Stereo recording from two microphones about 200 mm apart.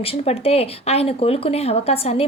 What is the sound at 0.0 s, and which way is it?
Speech, 30° left (ahead or behind).